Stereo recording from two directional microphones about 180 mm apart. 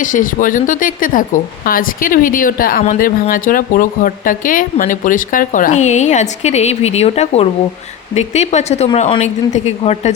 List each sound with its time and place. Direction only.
0.0 s a woman's voice: 45° left (ahead or behind)